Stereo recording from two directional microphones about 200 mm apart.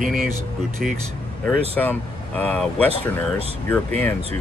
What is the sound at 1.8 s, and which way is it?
Speech, 10° left (ahead or behind).